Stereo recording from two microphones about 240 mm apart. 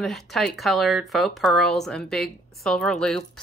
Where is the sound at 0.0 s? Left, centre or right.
Centre.